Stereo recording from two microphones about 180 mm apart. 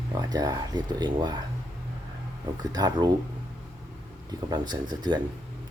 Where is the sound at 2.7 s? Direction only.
20° right (ahead or behind).